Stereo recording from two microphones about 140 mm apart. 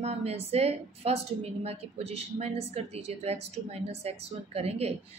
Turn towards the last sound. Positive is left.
turn(degrees=-50)  # may be behind; listen again after turning